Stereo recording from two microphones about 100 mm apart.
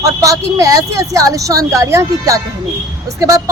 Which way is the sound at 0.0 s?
30° right (ahead or behind).